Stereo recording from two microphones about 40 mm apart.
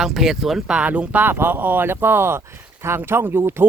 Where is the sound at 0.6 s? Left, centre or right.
Right.